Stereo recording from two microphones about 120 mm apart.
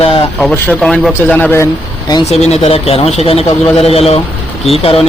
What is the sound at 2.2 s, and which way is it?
A man's voice, 65° left (ahead or behind).